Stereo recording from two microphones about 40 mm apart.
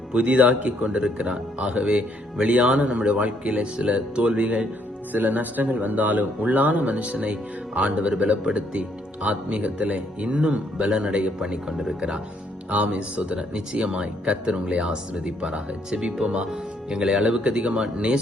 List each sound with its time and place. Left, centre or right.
0.1 s a man's voice: right
0.8 s speech: right
5.1 s a man's voice: right
8.1 s speech: centre
11.9 s a man's voice: right